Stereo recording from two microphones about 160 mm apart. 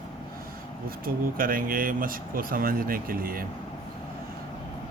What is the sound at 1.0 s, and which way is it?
Speech, 60° right (ahead or behind).